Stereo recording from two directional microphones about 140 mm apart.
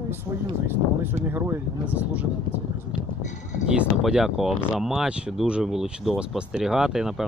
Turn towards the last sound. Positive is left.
turn(degrees=-5)  # may be behind; listen again after turning